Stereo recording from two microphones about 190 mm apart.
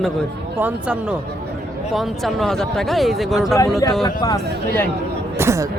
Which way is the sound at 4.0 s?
20° left (ahead or behind).